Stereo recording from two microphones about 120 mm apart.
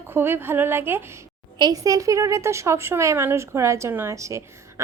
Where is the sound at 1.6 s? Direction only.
30° right (ahead or behind).